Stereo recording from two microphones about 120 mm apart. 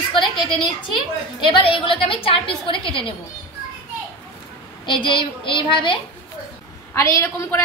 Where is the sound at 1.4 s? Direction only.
40° left (ahead or behind).